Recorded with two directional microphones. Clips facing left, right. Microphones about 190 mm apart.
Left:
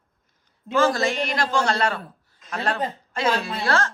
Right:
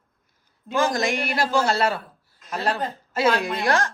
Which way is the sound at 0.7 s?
15° right (ahead or behind).